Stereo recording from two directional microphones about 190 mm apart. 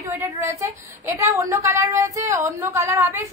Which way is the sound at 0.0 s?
15° right (ahead or behind).